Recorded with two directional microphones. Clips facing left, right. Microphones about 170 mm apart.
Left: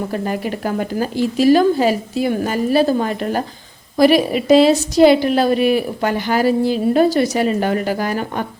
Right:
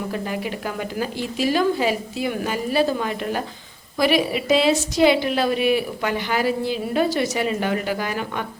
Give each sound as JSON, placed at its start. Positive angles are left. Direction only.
{"t": 0.1, "sound": "a woman's voice", "side_deg": 45}